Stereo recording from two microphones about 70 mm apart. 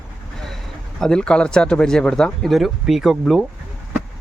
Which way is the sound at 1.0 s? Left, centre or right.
Centre.